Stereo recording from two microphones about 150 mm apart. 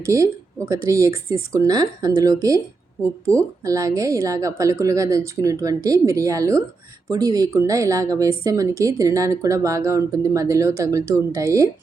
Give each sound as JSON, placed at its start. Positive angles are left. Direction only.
{"t": 0.0, "sound": "a woman's voice", "side_deg": -20}